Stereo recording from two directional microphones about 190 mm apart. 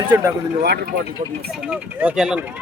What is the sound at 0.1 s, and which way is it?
Speech, 10° right (ahead or behind).